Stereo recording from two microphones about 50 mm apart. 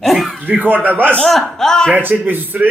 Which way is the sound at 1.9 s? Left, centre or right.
Right.